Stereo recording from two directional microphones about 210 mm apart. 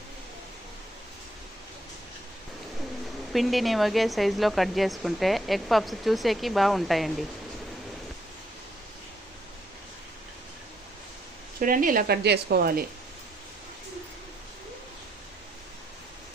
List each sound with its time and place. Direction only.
3.3 s speech: centre (ahead or behind)
11.6 s speech: 40° right (ahead or behind)